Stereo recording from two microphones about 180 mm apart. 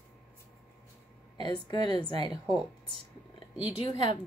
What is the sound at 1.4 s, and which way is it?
Speech, 25° left (ahead or behind).